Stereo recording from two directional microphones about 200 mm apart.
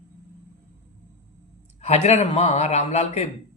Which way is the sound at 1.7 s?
35° left (ahead or behind).